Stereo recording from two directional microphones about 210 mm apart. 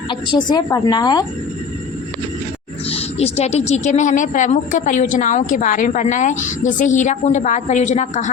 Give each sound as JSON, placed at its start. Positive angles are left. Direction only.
{"t": 0.1, "sound": "a woman's voice", "side_deg": 20}
{"t": 2.9, "sound": "speech", "side_deg": 30}